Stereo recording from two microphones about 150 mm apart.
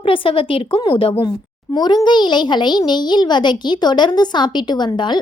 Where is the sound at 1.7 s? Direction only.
25° left (ahead or behind).